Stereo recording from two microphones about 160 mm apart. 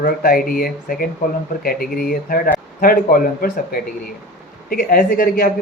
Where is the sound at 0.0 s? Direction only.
65° left (ahead or behind).